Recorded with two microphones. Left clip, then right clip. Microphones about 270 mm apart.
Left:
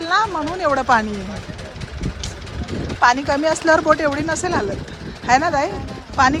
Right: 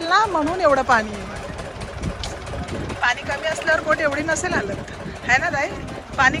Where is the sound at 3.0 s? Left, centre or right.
Left.